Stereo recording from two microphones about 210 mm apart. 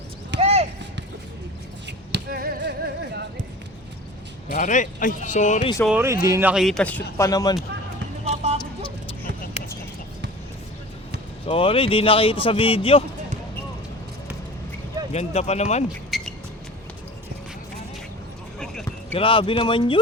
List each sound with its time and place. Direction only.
0.3 s a sound: 30° right (ahead or behind)
2.1 s a sound: 45° right (ahead or behind)
4.5 s speech: 35° left (ahead or behind)
5.8 s speech: 10° right (ahead or behind)
6.5 s speech: centre (ahead or behind)
7.2 s speech: 15° left (ahead or behind)
8.2 s basketball bounce: 30° right (ahead or behind)
11.4 s speech: 25° left (ahead or behind)
15.1 s speech: 30° left (ahead or behind)
16.0 s music: centre (ahead or behind)
18.6 s a sound: centre (ahead or behind)
19.1 s speech: 25° left (ahead or behind)